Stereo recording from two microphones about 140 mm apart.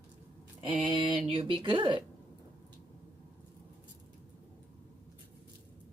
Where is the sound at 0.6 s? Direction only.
35° right (ahead or behind).